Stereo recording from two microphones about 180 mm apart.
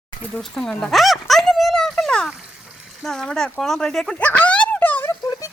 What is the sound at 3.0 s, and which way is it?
Speech, 5° left (ahead or behind).